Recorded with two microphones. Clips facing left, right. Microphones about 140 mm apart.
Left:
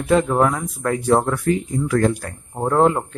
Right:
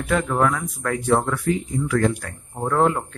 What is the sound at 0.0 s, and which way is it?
Speech, 25° left (ahead or behind).